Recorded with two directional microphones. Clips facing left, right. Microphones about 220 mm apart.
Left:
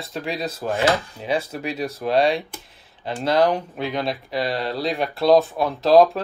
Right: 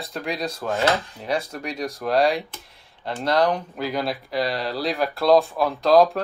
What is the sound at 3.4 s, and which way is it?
Speech, 25° left (ahead or behind).